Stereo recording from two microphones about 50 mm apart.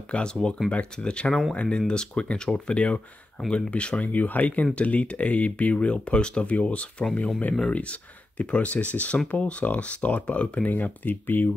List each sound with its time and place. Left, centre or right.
0.1 s speech: centre; by 11.5 s left